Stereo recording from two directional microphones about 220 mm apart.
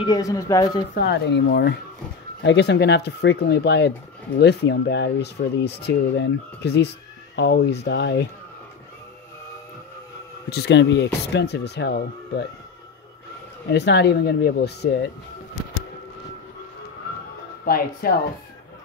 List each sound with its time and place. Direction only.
0.0 s speech: 15° left (ahead or behind)
0.9 s speech: 45° left (ahead or behind)
10.5 s speech: 50° left (ahead or behind)
13.7 s speech: 50° left (ahead or behind)
17.6 s speech: 40° left (ahead or behind)